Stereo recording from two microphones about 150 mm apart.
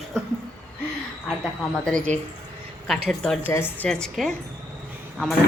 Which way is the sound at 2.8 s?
5° left (ahead or behind).